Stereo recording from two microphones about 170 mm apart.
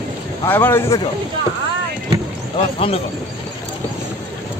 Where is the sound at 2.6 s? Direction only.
35° left (ahead or behind).